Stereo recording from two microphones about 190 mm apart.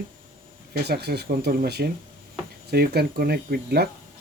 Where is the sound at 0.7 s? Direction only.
55° right (ahead or behind).